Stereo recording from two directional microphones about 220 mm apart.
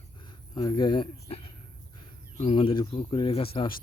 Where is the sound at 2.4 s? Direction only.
25° left (ahead or behind).